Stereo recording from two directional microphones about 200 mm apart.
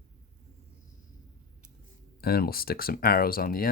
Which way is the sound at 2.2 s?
50° left (ahead or behind).